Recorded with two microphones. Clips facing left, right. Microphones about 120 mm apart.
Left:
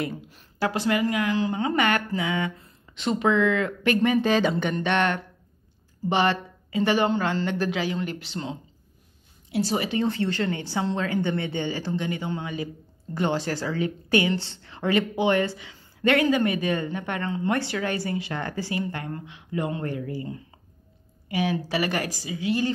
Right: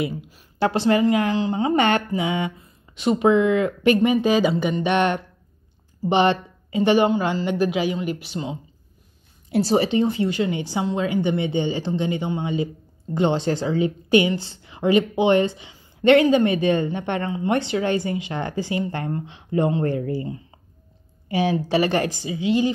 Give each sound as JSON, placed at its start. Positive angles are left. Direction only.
{"t": 0.0, "sound": "a sound", "side_deg": -10}
{"t": 0.6, "sound": "a woman's voice", "side_deg": -30}
{"t": 9.5, "sound": "speech", "side_deg": -40}
{"t": 9.8, "sound": "a woman's voice", "side_deg": -15}